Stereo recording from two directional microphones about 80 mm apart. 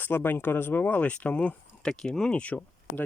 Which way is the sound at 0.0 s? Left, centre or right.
Left.